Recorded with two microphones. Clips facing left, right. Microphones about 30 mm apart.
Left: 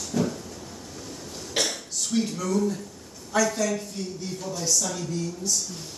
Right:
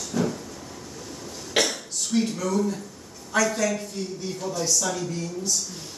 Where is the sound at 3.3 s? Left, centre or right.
Centre.